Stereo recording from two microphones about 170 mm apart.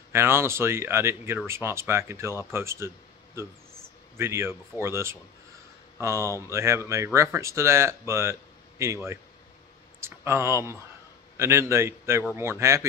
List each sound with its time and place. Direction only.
0.1 s speech: 15° right (ahead or behind)
4.2 s speech: 15° right (ahead or behind)